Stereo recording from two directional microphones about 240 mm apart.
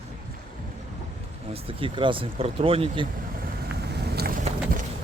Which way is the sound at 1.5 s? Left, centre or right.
Right.